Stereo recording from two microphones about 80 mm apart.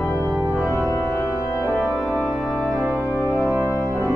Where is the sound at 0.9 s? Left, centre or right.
Left.